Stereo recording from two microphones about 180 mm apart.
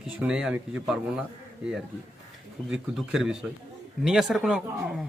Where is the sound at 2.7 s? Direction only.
5° right (ahead or behind).